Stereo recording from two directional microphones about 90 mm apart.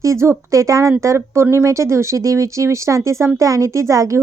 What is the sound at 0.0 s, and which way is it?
Speech, 30° right (ahead or behind).